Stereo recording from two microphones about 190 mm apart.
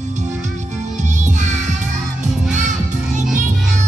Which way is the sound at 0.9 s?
40° right (ahead or behind).